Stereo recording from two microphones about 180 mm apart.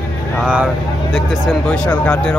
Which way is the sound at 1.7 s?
5° left (ahead or behind).